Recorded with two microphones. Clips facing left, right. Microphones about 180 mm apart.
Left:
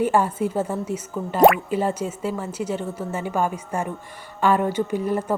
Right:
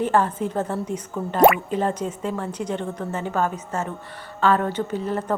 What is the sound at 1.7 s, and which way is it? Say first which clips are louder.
A woman's voice: even; 10° left (ahead or behind).